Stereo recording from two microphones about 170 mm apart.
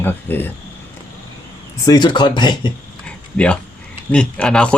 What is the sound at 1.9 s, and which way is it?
Speech, 25° left (ahead or behind).